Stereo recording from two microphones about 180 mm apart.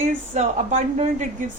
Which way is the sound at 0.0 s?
45° right (ahead or behind).